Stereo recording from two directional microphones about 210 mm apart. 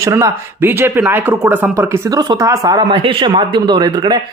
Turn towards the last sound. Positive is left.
turn(degrees=-20)  # may be behind; listen again after turning